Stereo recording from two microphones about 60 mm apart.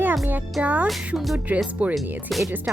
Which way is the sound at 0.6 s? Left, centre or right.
Right.